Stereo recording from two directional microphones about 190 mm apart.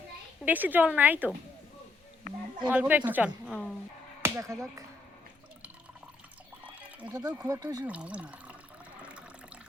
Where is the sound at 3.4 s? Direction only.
Centre (ahead or behind).